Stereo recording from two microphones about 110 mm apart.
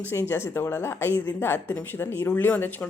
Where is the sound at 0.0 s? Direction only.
20° left (ahead or behind).